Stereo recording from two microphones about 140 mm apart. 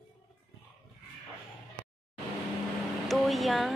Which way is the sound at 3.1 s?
Centre (ahead or behind).